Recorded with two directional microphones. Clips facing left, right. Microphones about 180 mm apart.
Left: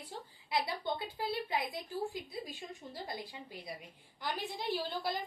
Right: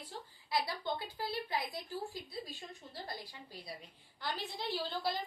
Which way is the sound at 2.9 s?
20° left (ahead or behind).